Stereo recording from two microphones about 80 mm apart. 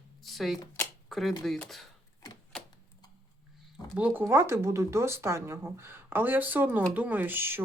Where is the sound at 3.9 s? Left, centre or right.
Right.